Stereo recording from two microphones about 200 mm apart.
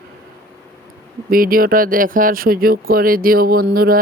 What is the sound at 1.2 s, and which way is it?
Speech, 45° right (ahead or behind).